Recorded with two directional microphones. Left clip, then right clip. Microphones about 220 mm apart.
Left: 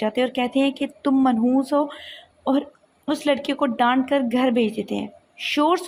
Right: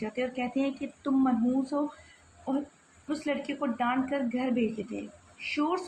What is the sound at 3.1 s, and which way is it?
Speech, 40° left (ahead or behind).